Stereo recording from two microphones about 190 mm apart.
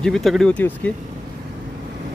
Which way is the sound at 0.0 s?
Centre (ahead or behind).